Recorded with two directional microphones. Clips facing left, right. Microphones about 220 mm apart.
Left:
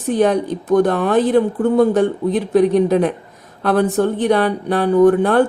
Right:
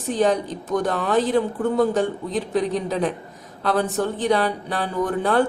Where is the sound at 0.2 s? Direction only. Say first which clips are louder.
Left 4 dB; 55° left (ahead or behind).